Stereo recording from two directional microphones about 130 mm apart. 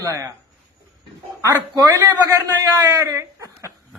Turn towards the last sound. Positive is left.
turn(degrees=-25)  # may be behind; listen again after turning